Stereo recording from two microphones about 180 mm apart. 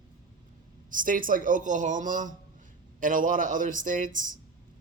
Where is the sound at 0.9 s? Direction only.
50° right (ahead or behind).